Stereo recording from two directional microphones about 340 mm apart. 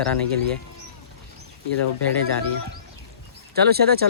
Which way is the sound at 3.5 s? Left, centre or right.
Right.